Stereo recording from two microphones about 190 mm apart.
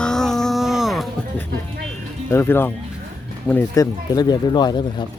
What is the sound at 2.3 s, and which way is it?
Speech, 10° left (ahead or behind).